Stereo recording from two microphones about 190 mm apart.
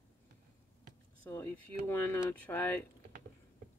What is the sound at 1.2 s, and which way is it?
Speech, 10° left (ahead or behind).